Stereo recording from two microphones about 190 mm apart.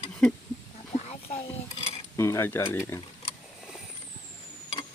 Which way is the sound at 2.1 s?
15° left (ahead or behind).